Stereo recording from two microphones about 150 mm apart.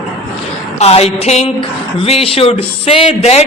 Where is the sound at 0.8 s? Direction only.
45° left (ahead or behind).